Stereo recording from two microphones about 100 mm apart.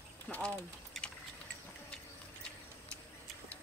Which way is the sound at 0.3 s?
10° left (ahead or behind).